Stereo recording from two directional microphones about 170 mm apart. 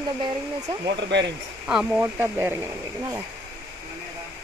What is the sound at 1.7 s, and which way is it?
Speech, 5° right (ahead or behind).